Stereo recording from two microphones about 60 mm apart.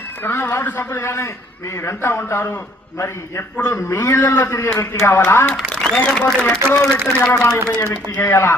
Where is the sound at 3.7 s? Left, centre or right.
Left.